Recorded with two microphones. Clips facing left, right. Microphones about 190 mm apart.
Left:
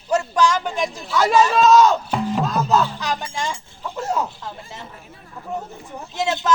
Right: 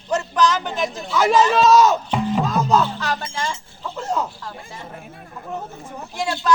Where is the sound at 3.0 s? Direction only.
15° left (ahead or behind).